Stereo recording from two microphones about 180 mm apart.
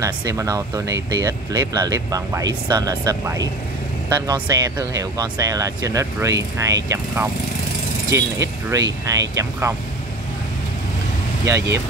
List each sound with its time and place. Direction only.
0.0 s speech: 20° right (ahead or behind)
11.4 s speech: 15° right (ahead or behind)